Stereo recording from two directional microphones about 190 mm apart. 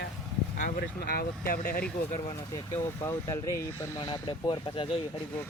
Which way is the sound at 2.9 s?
15° left (ahead or behind).